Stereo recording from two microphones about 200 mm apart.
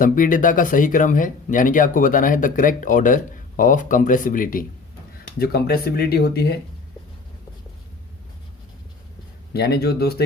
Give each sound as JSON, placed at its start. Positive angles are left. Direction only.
{"t": 0.0, "sound": "speech", "side_deg": 40}
{"t": 9.5, "sound": "speech", "side_deg": 50}